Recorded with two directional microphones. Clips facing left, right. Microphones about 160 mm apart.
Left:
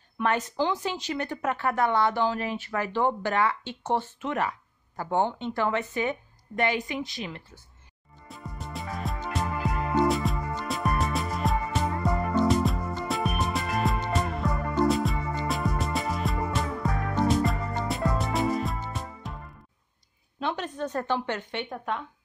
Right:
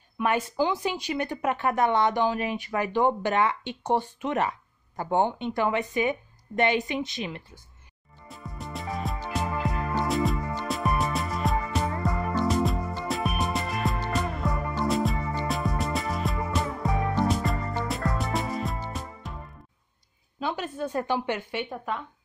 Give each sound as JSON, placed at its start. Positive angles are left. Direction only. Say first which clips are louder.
{"t": 0.2, "sound": "speech", "louder": "right 1 dB", "side_deg": -10}
{"t": 8.3, "sound": "music", "louder": "right 1 dB", "side_deg": 0}
{"t": 20.3, "sound": "speech", "louder": "even", "side_deg": -5}